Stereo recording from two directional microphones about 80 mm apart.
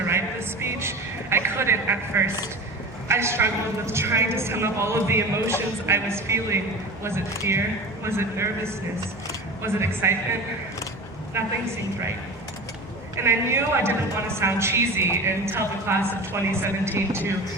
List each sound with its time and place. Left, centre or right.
0.1 s a sound: right
3.1 s a man's voice: right
11.3 s a man's voice: right
13.1 s a man's voice: right